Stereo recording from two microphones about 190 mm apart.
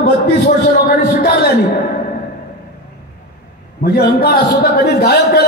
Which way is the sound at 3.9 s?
55° left (ahead or behind).